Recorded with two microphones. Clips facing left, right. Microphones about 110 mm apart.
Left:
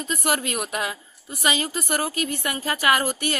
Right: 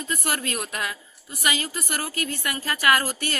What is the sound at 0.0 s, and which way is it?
A woman's voice, 20° left (ahead or behind).